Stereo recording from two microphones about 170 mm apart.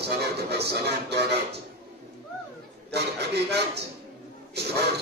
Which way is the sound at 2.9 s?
75° right (ahead or behind).